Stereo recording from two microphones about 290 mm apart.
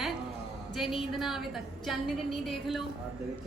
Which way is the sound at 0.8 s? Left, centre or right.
Centre.